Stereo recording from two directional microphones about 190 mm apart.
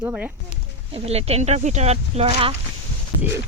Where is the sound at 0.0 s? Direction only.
10° right (ahead or behind).